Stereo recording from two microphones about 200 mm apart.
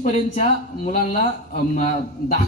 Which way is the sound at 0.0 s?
40° left (ahead or behind).